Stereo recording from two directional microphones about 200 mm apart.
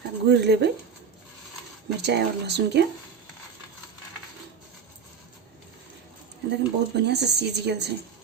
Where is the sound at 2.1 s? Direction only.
55° right (ahead or behind).